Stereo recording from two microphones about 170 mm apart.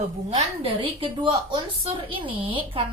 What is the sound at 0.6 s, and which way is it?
A woman's voice, 30° right (ahead or behind).